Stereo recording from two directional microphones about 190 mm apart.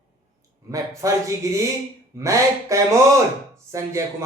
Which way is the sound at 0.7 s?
15° right (ahead or behind).